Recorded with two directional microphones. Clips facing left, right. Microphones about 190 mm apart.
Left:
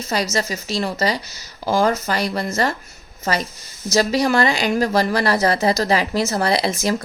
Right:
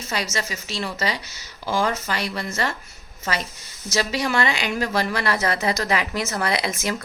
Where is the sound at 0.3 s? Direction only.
40° left (ahead or behind).